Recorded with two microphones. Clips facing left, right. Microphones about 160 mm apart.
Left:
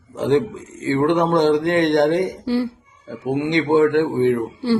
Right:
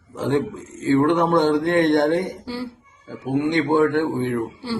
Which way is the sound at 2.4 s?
60° left (ahead or behind).